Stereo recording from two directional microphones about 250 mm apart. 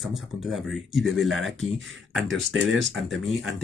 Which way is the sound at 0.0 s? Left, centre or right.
Centre.